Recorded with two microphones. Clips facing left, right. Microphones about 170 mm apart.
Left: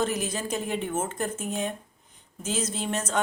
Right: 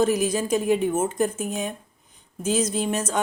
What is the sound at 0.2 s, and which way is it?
Speech, 10° right (ahead or behind).